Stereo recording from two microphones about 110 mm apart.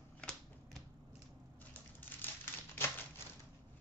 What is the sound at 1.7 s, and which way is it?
Crushing, 15° left (ahead or behind).